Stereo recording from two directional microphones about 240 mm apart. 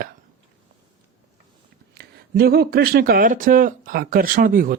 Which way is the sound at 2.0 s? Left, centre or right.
Right.